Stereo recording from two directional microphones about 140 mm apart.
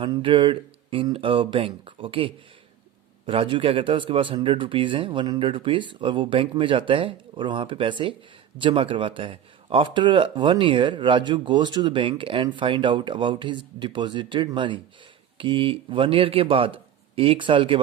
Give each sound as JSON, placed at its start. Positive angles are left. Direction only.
{"t": 0.0, "sound": "speech", "side_deg": -40}